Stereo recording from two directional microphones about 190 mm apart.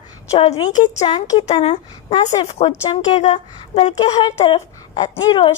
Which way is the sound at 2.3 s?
25° left (ahead or behind).